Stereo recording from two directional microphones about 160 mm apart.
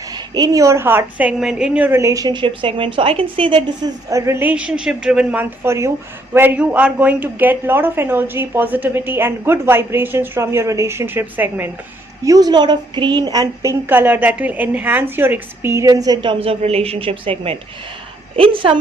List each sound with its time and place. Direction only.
0.1 s a woman's voice: 25° right (ahead or behind)
12.2 s a woman's voice: 25° right (ahead or behind)